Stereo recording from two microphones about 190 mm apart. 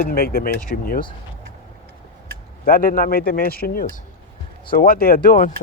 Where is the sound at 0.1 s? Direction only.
50° left (ahead or behind).